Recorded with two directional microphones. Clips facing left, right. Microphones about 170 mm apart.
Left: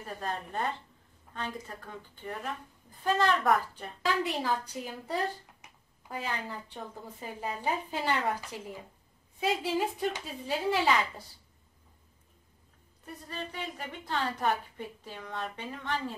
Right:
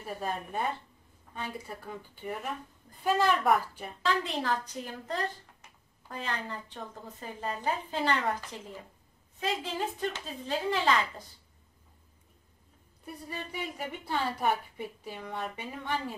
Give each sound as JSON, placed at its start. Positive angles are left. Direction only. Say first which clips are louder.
{"t": 0.0, "sound": "a woman's voice", "louder": "right 1 dB", "side_deg": -10}
{"t": 4.0, "sound": "speech", "louder": "even", "side_deg": 10}
{"t": 9.4, "sound": "speech", "louder": "left 3 dB", "side_deg": 10}
{"t": 13.0, "sound": "a woman's voice", "louder": "even", "side_deg": -10}